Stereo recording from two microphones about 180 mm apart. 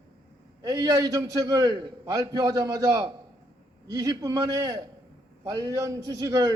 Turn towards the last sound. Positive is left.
turn(degrees=-20)  # may be behind; listen again after turning